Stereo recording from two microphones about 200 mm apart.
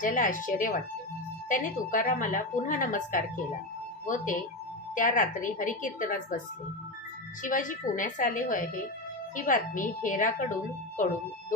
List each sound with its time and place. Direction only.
0.0 s a woman's voice: 40° left (ahead or behind)
7.4 s a woman's voice: 40° left (ahead or behind)